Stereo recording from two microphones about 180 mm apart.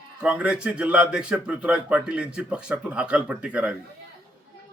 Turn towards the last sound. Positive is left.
turn(degrees=-5)  # may be behind; listen again after turning